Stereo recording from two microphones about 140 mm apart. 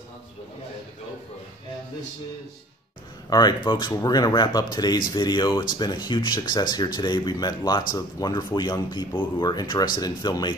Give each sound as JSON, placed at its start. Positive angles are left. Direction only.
{"t": 3.3, "sound": "speech", "side_deg": 30}